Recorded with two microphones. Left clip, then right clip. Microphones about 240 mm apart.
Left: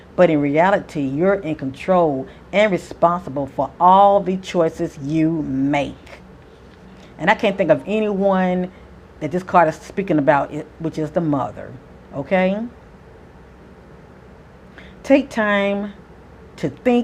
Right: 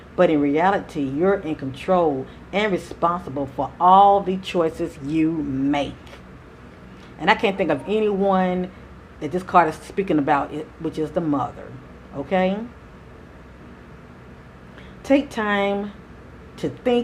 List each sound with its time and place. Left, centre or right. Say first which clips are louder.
0.2 s speech: left 3 dB; left
7.2 s speech: left 2 dB; left
15.0 s speech: left 4 dB; left